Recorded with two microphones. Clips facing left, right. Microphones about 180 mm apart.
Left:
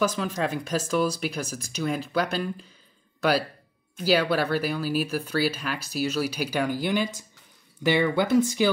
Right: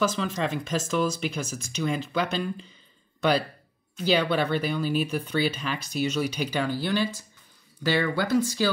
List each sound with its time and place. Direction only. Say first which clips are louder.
0.0 s speech: left 1 dB; 10° left (ahead or behind)